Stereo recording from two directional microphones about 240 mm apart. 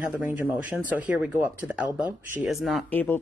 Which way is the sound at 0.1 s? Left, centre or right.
Centre.